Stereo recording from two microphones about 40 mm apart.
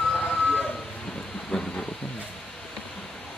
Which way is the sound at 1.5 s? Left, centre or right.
Centre.